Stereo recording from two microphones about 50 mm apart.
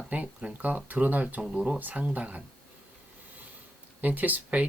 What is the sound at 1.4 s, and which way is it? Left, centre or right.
Speech, centre.